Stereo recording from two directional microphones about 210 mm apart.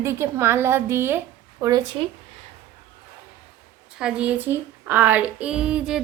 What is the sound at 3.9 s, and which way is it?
Speech, 5° right (ahead or behind).